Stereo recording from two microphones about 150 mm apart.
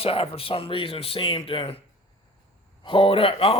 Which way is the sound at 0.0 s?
40° left (ahead or behind).